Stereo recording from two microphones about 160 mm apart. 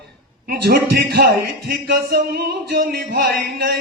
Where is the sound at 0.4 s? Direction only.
70° right (ahead or behind).